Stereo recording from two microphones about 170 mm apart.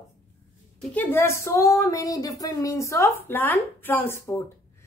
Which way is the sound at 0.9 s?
10° left (ahead or behind).